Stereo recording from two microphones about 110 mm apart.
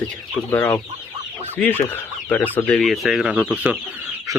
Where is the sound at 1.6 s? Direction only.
20° left (ahead or behind).